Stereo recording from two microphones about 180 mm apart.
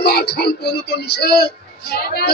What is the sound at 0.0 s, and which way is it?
Speech, 60° left (ahead or behind).